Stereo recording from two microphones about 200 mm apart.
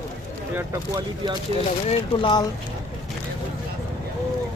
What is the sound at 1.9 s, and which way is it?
Speech, 25° left (ahead or behind).